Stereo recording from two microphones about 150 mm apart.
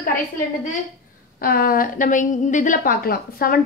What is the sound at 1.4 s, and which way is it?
A woman's voice, 85° left.